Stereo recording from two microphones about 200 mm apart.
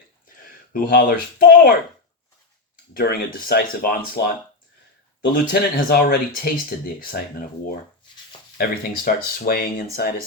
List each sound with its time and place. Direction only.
0.4 s speech: 45° left (ahead or behind)
2.9 s speech: 50° left (ahead or behind)
5.3 s speech: 45° left (ahead or behind)
8.5 s speech: 45° left (ahead or behind)